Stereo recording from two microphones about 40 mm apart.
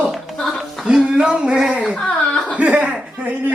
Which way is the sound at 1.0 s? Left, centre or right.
Right.